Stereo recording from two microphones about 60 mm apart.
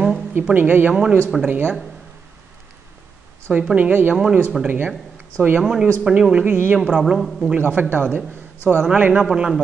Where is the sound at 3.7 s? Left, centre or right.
Right.